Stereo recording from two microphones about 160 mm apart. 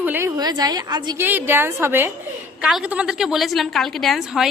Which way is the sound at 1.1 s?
10° right (ahead or behind).